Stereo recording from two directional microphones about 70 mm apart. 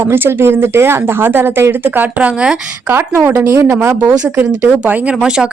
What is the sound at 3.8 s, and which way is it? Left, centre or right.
Speech, right.